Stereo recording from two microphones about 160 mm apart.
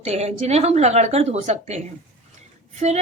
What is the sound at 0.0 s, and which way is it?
A woman's voice, 45° right (ahead or behind).